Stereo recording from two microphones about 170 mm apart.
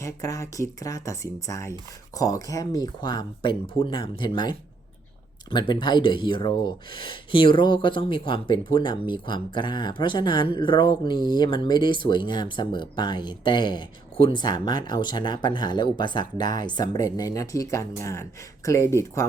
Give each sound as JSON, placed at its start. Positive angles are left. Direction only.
{"t": 0.0, "sound": "speech", "side_deg": 20}
{"t": 5.5, "sound": "speech", "side_deg": 25}